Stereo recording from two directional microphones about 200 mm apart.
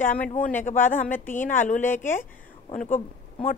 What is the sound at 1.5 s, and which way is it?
Speech, 40° left (ahead or behind).